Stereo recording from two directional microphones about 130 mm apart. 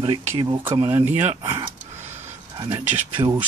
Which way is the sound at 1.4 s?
30° right (ahead or behind).